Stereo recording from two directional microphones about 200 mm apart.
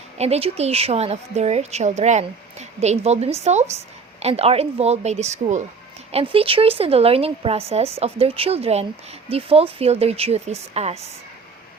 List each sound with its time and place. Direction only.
0.2 s a woman's voice: 30° right (ahead or behind)